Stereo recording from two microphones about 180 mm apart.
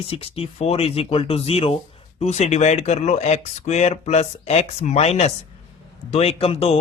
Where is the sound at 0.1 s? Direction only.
30° left (ahead or behind).